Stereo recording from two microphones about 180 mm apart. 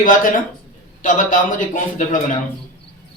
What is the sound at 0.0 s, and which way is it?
A man's voice, 50° left (ahead or behind).